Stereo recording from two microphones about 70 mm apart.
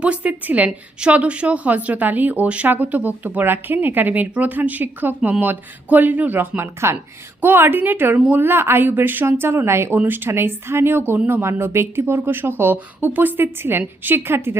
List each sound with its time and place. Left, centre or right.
0.0 s a woman's voice: centre
6.6 s a woman's voice: right